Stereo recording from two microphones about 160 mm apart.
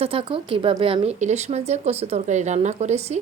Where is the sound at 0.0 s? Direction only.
35° right (ahead or behind).